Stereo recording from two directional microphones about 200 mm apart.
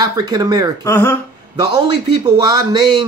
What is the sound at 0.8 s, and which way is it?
Speech, 10° left (ahead or behind).